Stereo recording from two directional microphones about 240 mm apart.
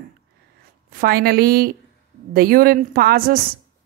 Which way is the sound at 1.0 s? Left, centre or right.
Right.